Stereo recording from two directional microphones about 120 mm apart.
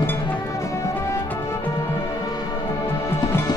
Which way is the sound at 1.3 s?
15° left (ahead or behind).